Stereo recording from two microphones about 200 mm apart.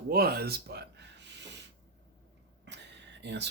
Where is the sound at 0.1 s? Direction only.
50° right (ahead or behind).